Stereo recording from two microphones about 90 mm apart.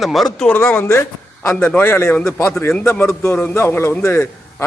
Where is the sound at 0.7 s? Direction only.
25° left (ahead or behind).